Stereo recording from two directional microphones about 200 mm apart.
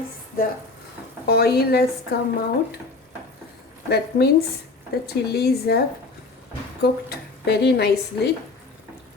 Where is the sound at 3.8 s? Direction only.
55° left (ahead or behind).